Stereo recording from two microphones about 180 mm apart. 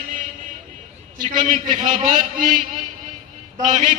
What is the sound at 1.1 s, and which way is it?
A man's voice, 45° right (ahead or behind).